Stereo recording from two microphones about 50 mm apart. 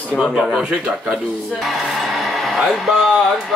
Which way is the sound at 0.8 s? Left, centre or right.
Centre.